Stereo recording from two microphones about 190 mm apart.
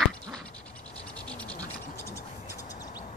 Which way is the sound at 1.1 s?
5° left (ahead or behind).